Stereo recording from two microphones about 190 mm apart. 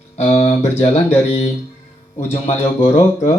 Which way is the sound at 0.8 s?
35° left (ahead or behind).